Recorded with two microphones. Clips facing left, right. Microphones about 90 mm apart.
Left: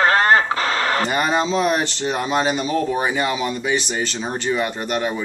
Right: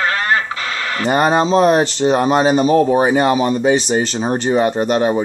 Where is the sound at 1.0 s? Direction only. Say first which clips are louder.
Right 5 dB; 45° right (ahead or behind).